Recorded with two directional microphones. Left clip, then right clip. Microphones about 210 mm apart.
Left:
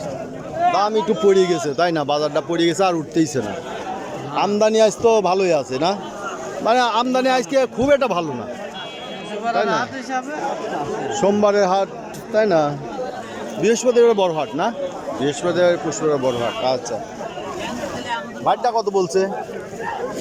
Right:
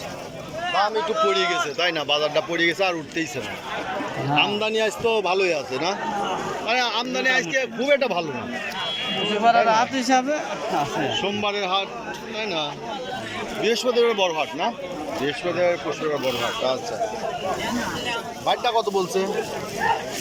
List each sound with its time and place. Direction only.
0.6 s a sound: 40° left (ahead or behind)
0.9 s a man's voice: 20° left (ahead or behind)
9.4 s a man's voice: centre (ahead or behind); by 10.4 s 15° right (ahead or behind)
11.1 s a man's voice: 35° left (ahead or behind)
13.6 s a man's voice: 15° left (ahead or behind)
18.4 s a man's voice: 10° left (ahead or behind)